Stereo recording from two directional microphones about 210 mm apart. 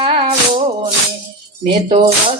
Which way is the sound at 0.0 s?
25° right (ahead or behind).